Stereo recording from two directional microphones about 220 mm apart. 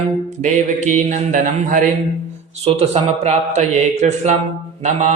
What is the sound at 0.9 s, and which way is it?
Speech, 35° right (ahead or behind).